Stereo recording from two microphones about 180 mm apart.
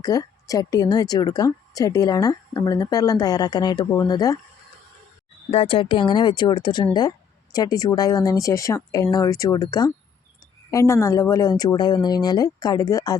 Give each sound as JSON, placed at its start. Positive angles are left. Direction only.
{"t": 0.0, "sound": "a woman's voice", "side_deg": 20}
{"t": 5.5, "sound": "a woman's voice", "side_deg": 30}